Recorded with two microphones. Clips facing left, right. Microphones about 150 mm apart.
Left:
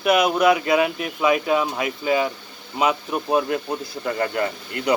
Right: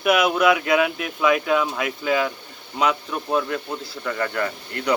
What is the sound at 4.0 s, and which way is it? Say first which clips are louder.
Speech: left 2 dB; 30° left (ahead or behind).